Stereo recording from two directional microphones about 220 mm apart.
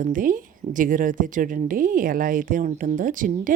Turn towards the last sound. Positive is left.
turn(degrees=-35)  # may be behind; listen again after turning